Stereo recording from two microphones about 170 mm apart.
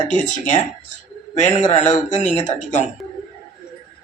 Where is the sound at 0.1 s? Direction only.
45° left (ahead or behind).